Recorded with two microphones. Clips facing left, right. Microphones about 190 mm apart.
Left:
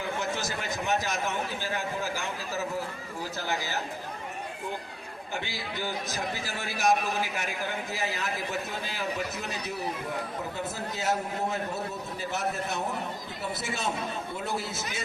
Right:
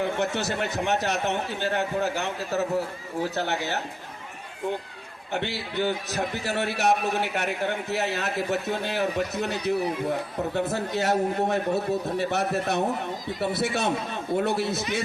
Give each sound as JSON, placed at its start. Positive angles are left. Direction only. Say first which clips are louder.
{"t": 0.0, "sound": "a man's voice", "louder": "right 6 dB", "side_deg": -65}
{"t": 5.3, "sound": "a man's voice", "louder": "right 7 dB", "side_deg": -65}